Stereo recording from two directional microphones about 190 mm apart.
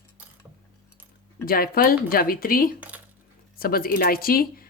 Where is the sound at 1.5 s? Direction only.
50° left (ahead or behind).